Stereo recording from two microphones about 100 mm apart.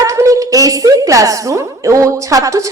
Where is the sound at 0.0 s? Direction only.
35° right (ahead or behind).